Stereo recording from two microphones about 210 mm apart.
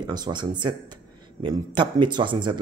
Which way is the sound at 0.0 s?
20° right (ahead or behind).